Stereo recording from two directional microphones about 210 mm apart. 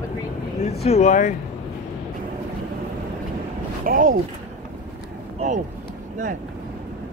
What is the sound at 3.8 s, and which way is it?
Speech, 40° right (ahead or behind).